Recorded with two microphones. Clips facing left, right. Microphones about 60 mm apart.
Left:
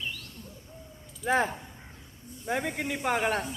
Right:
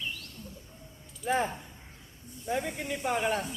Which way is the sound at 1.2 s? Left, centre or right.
Left.